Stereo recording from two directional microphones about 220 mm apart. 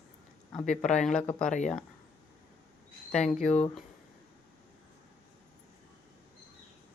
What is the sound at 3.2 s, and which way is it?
Speech, 35° left (ahead or behind).